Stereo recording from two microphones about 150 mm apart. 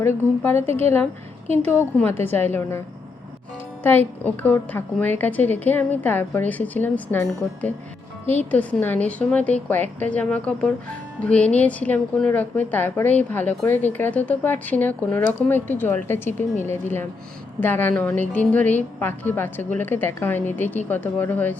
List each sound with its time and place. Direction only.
0.0 s a woman's voice: 15° left (ahead or behind)
2.2 s a woman's voice: 15° left (ahead or behind)
3.8 s a woman's voice: 15° left (ahead or behind)
8.3 s a woman's voice: 10° left (ahead or behind)